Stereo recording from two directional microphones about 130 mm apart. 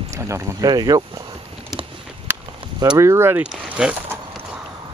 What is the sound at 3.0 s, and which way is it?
Speech, 20° right (ahead or behind).